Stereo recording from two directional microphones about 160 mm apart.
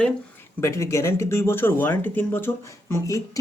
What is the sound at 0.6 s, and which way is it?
Speech, 20° left (ahead or behind).